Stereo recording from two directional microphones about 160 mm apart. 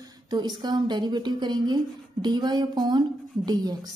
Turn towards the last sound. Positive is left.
turn(degrees=-25)  # may be behind; listen again after turning